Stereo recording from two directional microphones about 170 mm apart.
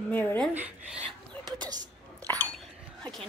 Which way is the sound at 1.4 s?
25° right (ahead or behind).